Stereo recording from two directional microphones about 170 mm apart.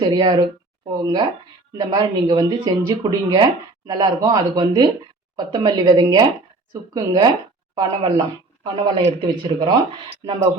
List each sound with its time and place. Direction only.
0.0 s speech: 25° right (ahead or behind)